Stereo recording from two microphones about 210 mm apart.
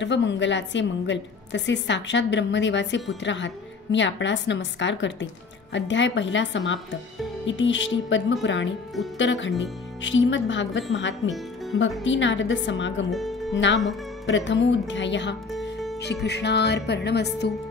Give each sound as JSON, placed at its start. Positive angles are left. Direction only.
{"t": 0.0, "sound": "a woman's voice", "side_deg": 60}
{"t": 13.1, "sound": "speech", "side_deg": 0}
{"t": 13.5, "sound": "a woman's voice", "side_deg": 60}
{"t": 15.5, "sound": "music", "side_deg": 0}
{"t": 16.0, "sound": "speech", "side_deg": 55}